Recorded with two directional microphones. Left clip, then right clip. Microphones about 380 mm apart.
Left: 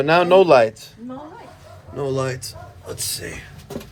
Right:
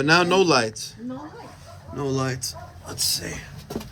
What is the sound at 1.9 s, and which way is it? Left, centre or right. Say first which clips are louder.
Speech: left 3 dB; centre.